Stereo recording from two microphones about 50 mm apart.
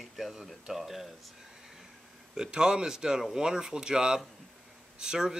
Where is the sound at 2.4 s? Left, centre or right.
Centre.